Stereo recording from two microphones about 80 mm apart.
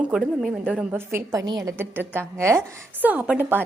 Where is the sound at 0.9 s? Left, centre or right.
Right.